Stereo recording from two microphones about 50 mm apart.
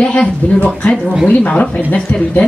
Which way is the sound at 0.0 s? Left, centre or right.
Centre.